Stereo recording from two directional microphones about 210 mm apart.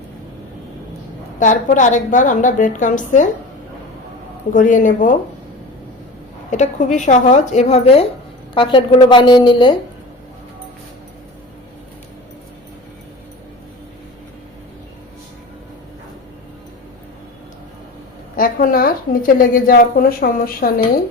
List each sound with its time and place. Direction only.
1.4 s a woman's voice: 35° left (ahead or behind)
4.5 s a woman's voice: 40° left (ahead or behind)
6.5 s a woman's voice: 35° left (ahead or behind)
18.3 s a woman's voice: 40° left (ahead or behind)